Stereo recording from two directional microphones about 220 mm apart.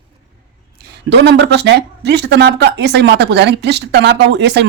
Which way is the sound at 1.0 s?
50° right (ahead or behind).